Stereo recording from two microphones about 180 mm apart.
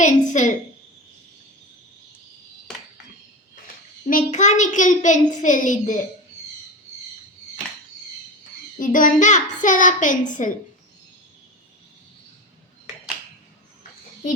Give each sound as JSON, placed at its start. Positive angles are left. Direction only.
{"t": 0.0, "sound": "a sound", "side_deg": 40}
{"t": 4.1, "sound": "a child's voice", "side_deg": 45}
{"t": 8.8, "sound": "a child's voice", "side_deg": 45}